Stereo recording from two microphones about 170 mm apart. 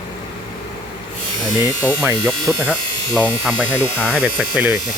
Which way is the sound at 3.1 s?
Centre (ahead or behind).